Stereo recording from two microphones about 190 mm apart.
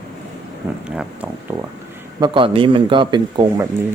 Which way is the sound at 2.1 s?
25° right (ahead or behind).